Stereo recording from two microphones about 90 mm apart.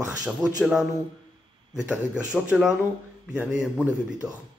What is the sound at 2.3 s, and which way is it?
Speech, 10° right (ahead or behind).